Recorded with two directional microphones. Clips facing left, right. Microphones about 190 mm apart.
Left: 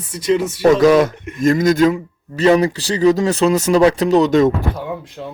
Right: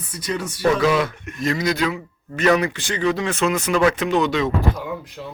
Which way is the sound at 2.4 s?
30° left (ahead or behind).